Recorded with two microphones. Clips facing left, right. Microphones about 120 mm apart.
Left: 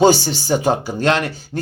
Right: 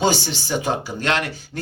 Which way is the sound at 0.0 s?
40° left (ahead or behind).